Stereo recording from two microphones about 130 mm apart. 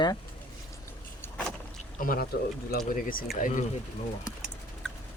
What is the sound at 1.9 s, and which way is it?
Pour, 90° left.